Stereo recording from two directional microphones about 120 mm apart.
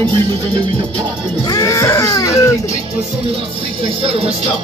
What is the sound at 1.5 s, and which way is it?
Speech, 30° left (ahead or behind).